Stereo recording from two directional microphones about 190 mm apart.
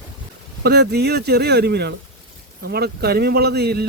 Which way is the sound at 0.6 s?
60° right (ahead or behind).